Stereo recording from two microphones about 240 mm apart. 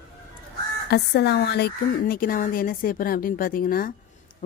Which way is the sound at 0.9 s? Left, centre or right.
Left.